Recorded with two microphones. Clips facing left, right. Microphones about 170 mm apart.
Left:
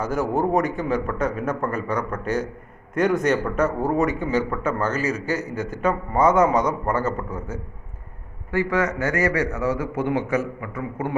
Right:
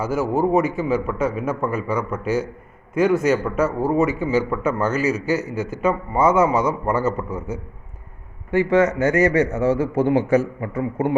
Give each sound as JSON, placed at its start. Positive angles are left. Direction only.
{"t": 0.0, "sound": "a man's voice", "side_deg": -5}
{"t": 8.4, "sound": "a man's voice", "side_deg": -20}